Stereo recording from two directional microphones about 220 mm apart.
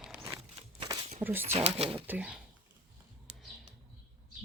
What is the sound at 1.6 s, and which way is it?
Speech, 25° right (ahead or behind).